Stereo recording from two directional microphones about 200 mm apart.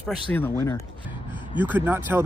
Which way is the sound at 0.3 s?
10° left (ahead or behind).